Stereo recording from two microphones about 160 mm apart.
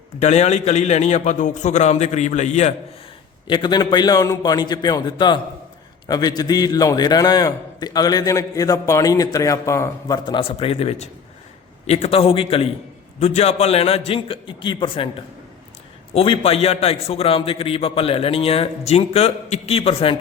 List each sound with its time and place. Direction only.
0.2 s a man's voice: 45° left (ahead or behind)
3.4 s a man's voice: 30° left (ahead or behind)
10.2 s a man's voice: 30° left (ahead or behind)
16.1 s a man's voice: 35° left (ahead or behind)